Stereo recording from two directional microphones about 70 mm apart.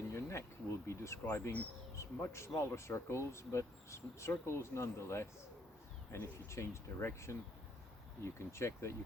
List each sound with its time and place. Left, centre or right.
0.1 s bee: left
0.9 s speech: left
1.3 s speech: left
2.0 s speech: left
6.5 s speech: left